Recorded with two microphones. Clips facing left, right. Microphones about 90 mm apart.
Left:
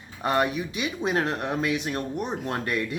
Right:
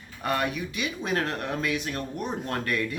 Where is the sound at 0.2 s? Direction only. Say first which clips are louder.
Left 3 dB; 25° left (ahead or behind).